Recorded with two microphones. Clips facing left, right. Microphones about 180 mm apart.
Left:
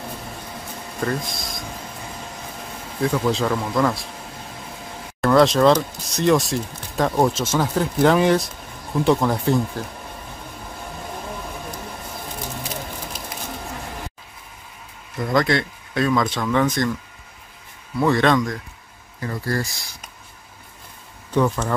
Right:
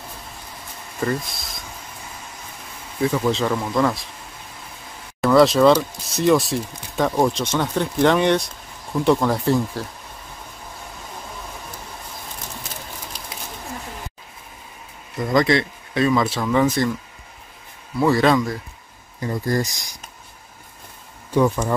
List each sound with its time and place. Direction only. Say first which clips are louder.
1.0 s speech: right 1 dB; centre (ahead or behind)
3.0 s speech: right 1 dB; centre (ahead or behind)
5.2 s speech: right 1 dB; centre (ahead or behind)
15.1 s speech: right 2 dB; centre (ahead or behind)
17.9 s speech: right 1 dB; centre (ahead or behind)
19.1 s speech: right 3 dB; 20° right (ahead or behind)
21.3 s speech: right 2 dB; 10° right (ahead or behind)